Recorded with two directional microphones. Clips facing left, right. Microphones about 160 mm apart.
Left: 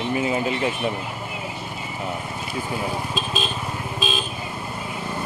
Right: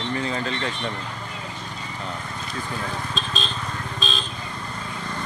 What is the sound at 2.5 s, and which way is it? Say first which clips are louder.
Vehicle: left 4 dB; 10° left (ahead or behind).